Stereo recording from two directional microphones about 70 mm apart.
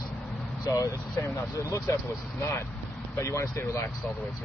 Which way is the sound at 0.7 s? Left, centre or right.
Left.